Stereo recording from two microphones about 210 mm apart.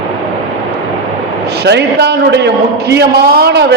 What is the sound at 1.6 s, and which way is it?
A man's voice, 50° right (ahead or behind).